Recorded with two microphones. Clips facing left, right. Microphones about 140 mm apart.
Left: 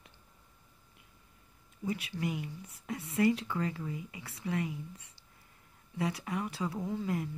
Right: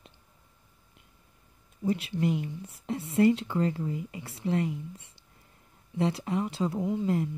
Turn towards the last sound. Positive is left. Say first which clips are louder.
# right 6 dB
turn(degrees=-20)  # may be behind; listen again after turning